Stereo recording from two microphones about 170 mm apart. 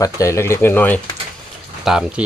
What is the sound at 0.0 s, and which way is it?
Speech, 20° left (ahead or behind).